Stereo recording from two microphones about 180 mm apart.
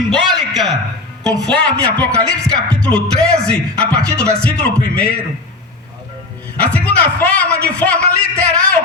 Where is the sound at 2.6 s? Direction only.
5° left (ahead or behind).